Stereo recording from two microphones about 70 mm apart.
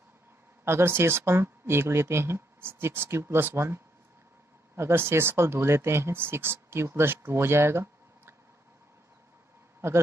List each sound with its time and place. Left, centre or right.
0.7 s speech: right
9.8 s speech: right